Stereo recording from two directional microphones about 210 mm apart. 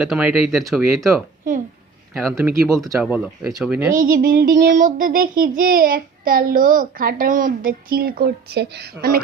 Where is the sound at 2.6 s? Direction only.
Centre (ahead or behind).